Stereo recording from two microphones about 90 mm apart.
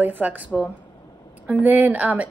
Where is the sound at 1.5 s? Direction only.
20° right (ahead or behind).